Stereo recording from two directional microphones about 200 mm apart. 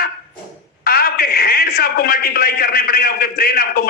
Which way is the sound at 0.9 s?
50° left (ahead or behind).